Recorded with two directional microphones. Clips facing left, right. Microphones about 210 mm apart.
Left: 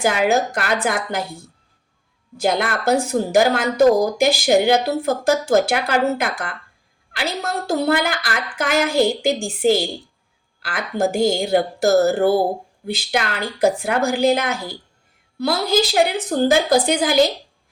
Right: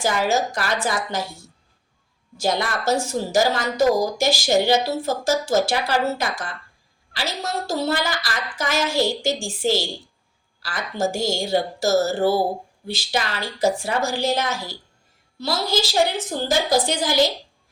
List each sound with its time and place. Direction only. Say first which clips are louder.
0.0 s a woman's voice: left 3 dB; 60° left (ahead or behind)